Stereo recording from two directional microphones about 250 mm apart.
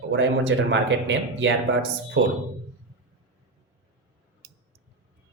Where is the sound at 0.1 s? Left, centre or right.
Right.